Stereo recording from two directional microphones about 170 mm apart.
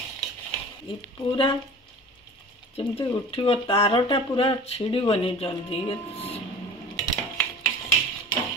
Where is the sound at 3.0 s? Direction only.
35° left (ahead or behind).